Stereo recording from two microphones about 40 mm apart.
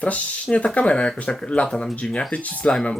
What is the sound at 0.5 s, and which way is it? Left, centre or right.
Speech, left.